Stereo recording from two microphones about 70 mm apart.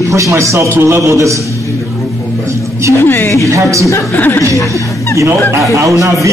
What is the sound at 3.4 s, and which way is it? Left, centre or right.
Speech, right.